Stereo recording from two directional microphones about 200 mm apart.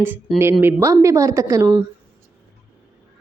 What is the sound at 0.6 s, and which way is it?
A man's voice, 10° right (ahead or behind).